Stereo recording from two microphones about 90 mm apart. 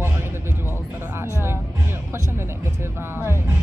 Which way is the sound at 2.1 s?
30° right (ahead or behind).